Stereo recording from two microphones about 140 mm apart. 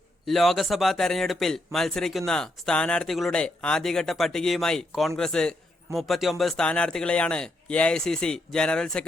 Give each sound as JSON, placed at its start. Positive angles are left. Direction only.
{"t": 0.3, "sound": "speech", "side_deg": 0}